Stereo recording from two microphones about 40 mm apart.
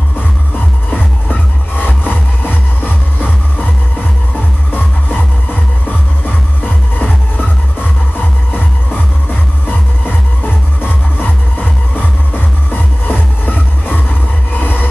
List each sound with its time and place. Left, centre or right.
0.9 s music: left
4.7 s music: left
9.7 s music: left
14.6 s a sound: left